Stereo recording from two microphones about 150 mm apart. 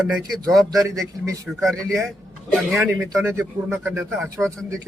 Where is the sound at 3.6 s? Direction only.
5° right (ahead or behind).